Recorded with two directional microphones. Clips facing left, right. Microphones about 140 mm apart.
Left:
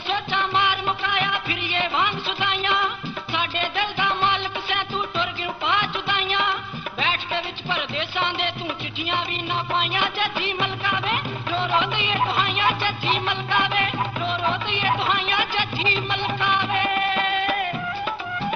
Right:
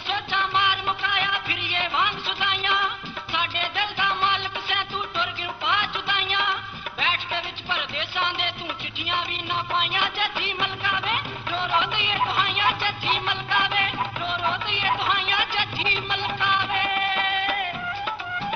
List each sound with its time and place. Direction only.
0.1 s music: 35° left (ahead or behind)